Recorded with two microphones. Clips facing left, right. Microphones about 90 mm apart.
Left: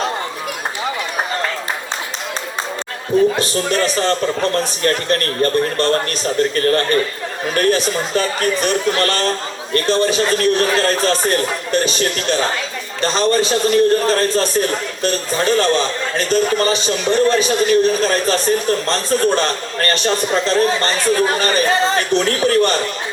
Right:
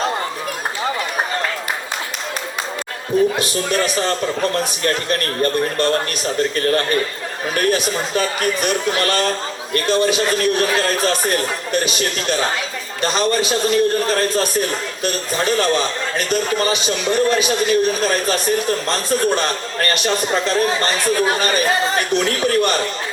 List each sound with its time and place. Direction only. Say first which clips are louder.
3.3 s a man's voice: left 2 dB; 35° left (ahead or behind)